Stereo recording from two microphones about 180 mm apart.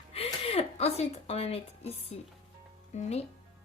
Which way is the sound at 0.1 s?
35° left (ahead or behind).